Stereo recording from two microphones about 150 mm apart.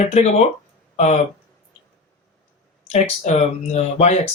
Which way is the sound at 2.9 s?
45° left (ahead or behind).